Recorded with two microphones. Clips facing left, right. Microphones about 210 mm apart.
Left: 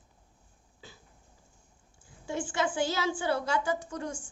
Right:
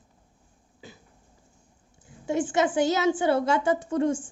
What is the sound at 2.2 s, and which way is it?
A woman's voice, 20° right (ahead or behind).